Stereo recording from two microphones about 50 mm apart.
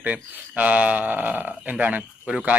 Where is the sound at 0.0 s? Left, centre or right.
Right.